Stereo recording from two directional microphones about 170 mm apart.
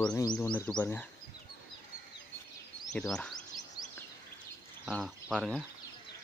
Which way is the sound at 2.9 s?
5° left (ahead or behind).